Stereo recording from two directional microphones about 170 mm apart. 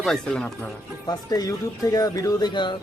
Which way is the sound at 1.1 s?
20° left (ahead or behind).